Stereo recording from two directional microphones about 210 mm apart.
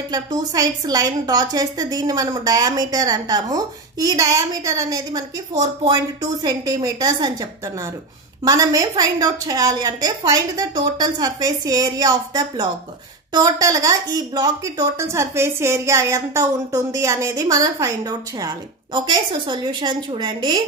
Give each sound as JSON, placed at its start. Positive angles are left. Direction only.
{"t": 0.1, "sound": "a woman's voice", "side_deg": -20}